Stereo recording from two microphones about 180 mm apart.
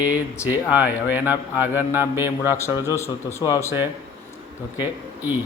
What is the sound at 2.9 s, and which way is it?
Speech, 15° left (ahead or behind).